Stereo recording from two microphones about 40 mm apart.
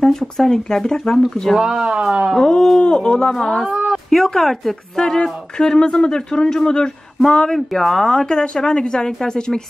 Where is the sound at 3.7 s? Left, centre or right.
Centre.